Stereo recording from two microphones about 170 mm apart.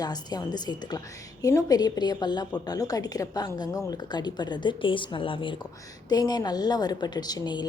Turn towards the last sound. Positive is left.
turn(degrees=25)  # may be behind; listen again after turning